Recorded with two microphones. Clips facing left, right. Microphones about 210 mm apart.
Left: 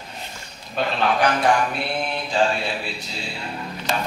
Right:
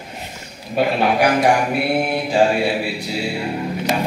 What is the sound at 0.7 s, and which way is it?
Mantra, 10° right (ahead or behind).